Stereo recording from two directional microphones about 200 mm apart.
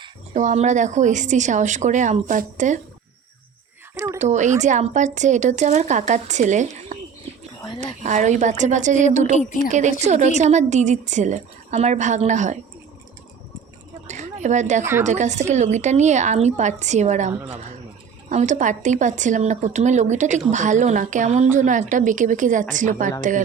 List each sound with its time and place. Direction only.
0.3 s speech: 35° right (ahead or behind)
3.9 s speech: 15° right (ahead or behind)
4.2 s speech: 35° right (ahead or behind)
9.3 s a woman's voice: 35° left (ahead or behind)
9.6 s speech: 35° right (ahead or behind)
14.1 s a sound: 35° right (ahead or behind)
15.0 s speech: 35° right (ahead or behind)